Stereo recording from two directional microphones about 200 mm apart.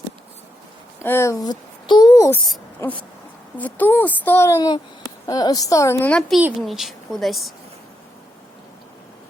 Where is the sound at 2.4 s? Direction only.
5° left (ahead or behind).